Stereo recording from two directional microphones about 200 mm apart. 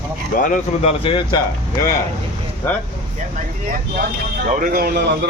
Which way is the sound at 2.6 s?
10° left (ahead or behind).